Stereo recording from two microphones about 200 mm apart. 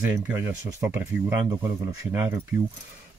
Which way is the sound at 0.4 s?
15° right (ahead or behind).